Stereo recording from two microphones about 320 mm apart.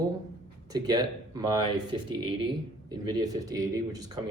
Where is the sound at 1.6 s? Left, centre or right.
Right.